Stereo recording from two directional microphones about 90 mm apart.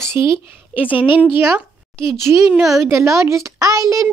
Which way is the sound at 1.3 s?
25° right (ahead or behind).